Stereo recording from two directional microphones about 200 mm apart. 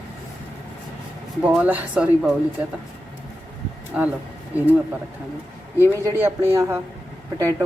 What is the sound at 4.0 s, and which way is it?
Speech, 10° right (ahead or behind).